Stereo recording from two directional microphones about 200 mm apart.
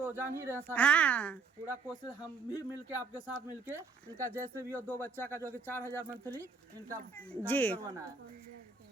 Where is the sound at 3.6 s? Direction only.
15° right (ahead or behind).